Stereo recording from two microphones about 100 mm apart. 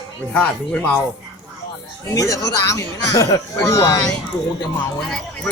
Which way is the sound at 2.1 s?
35° left (ahead or behind).